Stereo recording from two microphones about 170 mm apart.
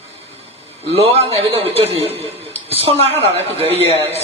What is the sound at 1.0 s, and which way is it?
Speech, 35° right (ahead or behind).